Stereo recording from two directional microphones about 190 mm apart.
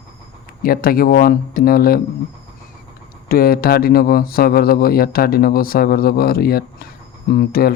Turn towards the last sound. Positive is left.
turn(degrees=55)  # may be behind; listen again after turning